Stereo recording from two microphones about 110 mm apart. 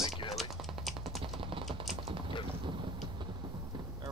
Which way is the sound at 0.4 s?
Centre (ahead or behind).